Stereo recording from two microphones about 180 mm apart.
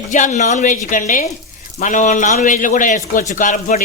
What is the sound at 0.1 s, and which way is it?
A man's voice, 40° left (ahead or behind).